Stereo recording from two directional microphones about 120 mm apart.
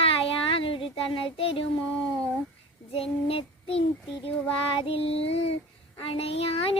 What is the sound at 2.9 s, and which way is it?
Child singing, 50° left (ahead or behind).